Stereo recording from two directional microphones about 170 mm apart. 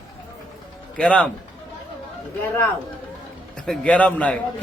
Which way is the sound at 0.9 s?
5° left (ahead or behind).